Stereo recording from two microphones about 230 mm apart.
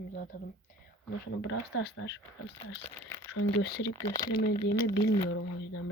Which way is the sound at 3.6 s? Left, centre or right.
Left.